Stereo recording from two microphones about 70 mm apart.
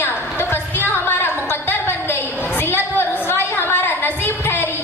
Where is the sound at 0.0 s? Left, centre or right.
Left.